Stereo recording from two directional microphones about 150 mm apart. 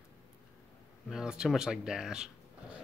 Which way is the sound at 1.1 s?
5° right (ahead or behind).